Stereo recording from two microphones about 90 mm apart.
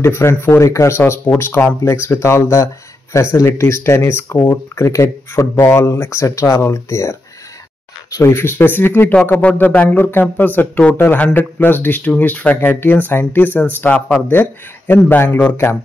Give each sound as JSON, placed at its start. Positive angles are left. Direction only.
{"t": 0.0, "sound": "speech", "side_deg": 30}